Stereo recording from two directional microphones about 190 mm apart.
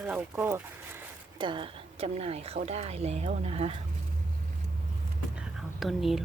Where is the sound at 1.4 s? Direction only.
25° right (ahead or behind).